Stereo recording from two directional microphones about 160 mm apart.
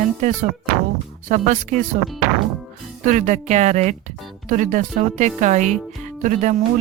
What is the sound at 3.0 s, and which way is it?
Speech, 50° right (ahead or behind).